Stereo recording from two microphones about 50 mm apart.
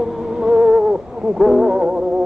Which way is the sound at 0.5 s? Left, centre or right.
Centre.